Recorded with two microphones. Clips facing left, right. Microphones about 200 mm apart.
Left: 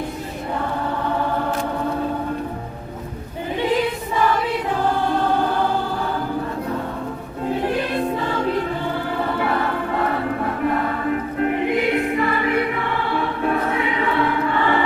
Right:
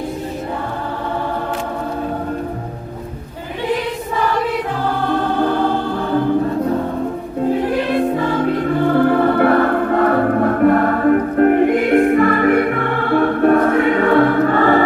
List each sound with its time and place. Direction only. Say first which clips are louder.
8.6 s music: right 10 dB; 55° right (ahead or behind)